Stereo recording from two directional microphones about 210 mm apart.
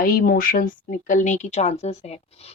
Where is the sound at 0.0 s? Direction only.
45° left (ahead or behind).